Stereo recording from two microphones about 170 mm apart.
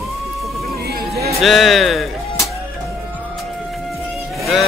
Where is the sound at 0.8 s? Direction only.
65° right (ahead or behind).